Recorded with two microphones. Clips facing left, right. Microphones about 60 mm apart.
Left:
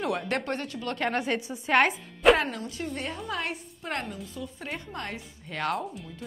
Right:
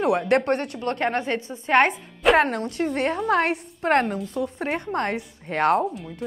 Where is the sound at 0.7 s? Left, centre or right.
Right.